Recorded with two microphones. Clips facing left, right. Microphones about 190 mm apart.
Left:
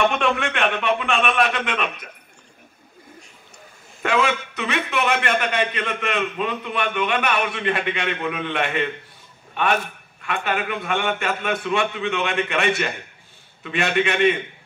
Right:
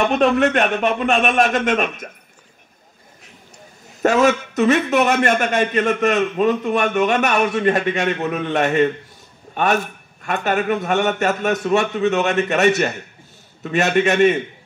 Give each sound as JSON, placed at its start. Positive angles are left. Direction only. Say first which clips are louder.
{"t": 0.0, "sound": "a man's voice", "louder": "right 5 dB", "side_deg": -40}
{"t": 4.0, "sound": "a man's voice", "louder": "right 6 dB", "side_deg": -45}